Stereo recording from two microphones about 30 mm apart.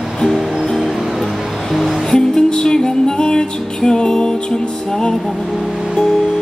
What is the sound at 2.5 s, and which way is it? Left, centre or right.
Music, left.